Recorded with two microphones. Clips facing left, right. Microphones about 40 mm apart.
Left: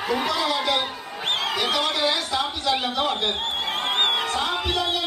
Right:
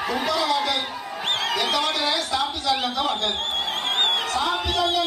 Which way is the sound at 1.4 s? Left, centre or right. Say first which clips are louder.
Right 1 dB; centre.